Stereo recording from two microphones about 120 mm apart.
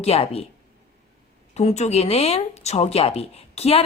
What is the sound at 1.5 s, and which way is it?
A woman's voice, 65° left (ahead or behind).